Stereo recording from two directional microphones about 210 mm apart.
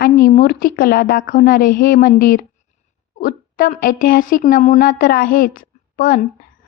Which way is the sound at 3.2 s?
40° left (ahead or behind).